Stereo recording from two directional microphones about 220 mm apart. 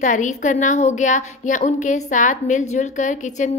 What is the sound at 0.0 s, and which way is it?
A woman's voice, 35° left (ahead or behind).